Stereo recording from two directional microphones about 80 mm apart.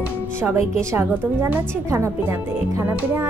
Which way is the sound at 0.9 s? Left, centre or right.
Right.